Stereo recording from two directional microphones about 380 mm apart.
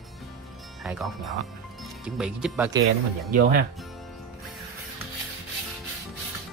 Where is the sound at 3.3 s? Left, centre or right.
Right.